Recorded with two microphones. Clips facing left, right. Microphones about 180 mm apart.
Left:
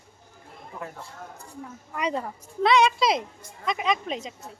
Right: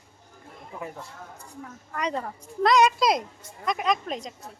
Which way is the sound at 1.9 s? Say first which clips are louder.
Left 1 dB; 5° left (ahead or behind).